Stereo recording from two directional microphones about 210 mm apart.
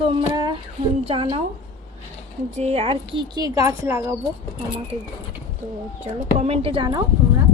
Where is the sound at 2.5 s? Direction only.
30° right (ahead or behind); by 4.2 s 15° right (ahead or behind).